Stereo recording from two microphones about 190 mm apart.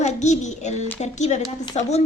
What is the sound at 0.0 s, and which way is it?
A woman's voice, 40° left (ahead or behind).